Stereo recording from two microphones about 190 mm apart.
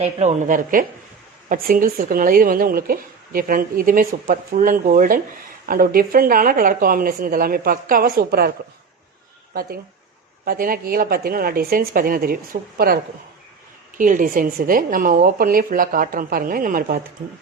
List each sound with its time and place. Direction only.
0.0 s speech: 35° right (ahead or behind); by 8.5 s 55° right (ahead or behind)
9.6 s speech: 50° right (ahead or behind)
14.0 s speech: 45° right (ahead or behind)